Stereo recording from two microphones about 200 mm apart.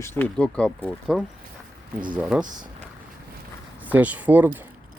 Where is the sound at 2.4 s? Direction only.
40° right (ahead or behind).